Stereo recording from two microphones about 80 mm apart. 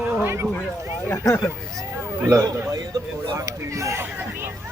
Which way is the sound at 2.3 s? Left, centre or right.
Right.